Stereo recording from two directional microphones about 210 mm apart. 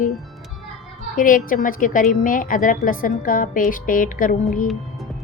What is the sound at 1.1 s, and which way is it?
A woman's voice, 40° left (ahead or behind).